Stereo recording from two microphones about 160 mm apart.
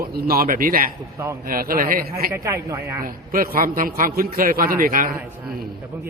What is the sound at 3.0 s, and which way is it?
A man's voice, 65° right (ahead or behind).